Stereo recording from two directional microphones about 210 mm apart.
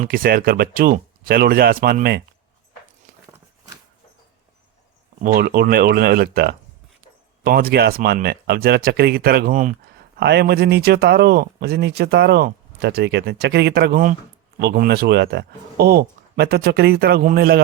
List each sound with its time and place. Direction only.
0.0 s speech: 45° right (ahead or behind)
5.2 s speech: 45° right (ahead or behind)
10.2 s speech: 50° right (ahead or behind)